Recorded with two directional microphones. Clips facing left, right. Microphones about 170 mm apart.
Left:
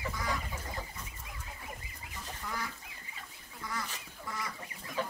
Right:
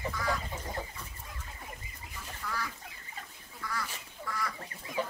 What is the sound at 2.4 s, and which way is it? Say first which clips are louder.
Goose: right 2 dB; 20° left (ahead or behind).